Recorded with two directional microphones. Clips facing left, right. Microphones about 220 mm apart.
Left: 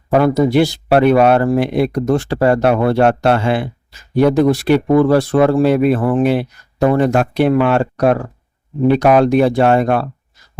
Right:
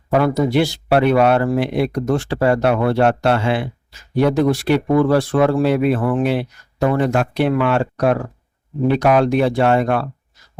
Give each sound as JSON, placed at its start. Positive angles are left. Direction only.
{"t": 0.1, "sound": "speech", "side_deg": 40}